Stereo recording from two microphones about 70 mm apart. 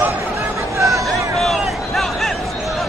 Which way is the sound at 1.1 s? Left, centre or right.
Centre.